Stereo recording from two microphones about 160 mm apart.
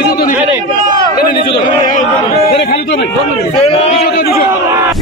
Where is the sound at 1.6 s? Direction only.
55° left (ahead or behind).